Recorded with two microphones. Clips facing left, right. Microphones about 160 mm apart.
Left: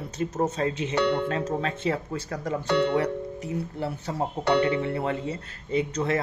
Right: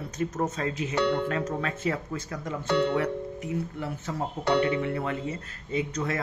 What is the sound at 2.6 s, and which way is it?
Speech, 70° left (ahead or behind).